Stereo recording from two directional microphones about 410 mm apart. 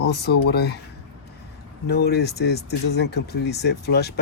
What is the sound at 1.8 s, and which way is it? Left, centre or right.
Speech, left.